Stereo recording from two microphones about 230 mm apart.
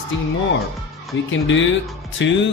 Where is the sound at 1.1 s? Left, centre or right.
Left.